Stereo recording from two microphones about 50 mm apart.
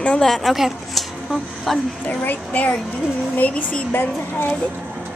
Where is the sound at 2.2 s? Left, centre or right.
Left.